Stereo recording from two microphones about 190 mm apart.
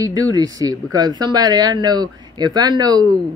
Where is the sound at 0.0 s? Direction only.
20° right (ahead or behind).